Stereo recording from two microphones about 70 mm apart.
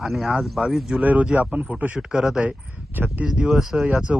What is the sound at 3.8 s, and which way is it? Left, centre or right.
Speech, centre.